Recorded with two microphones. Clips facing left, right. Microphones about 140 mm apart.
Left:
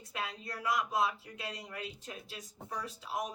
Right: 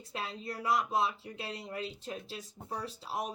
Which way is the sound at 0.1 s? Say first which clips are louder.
Right 1 dB; 30° right (ahead or behind).